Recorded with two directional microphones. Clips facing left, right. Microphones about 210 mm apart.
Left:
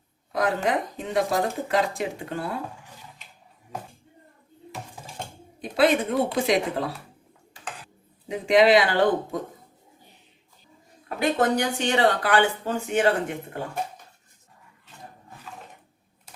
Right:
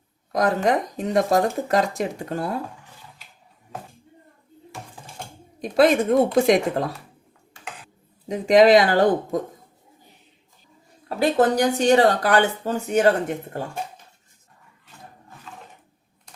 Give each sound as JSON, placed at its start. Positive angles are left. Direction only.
{"t": 0.3, "sound": "speech", "side_deg": -40}
{"t": 5.7, "sound": "speech", "side_deg": -45}
{"t": 8.3, "sound": "speech", "side_deg": -40}
{"t": 11.2, "sound": "speech", "side_deg": -35}